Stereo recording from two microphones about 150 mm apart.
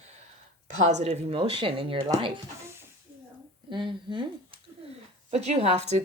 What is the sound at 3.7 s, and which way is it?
Speech, 30° right (ahead or behind).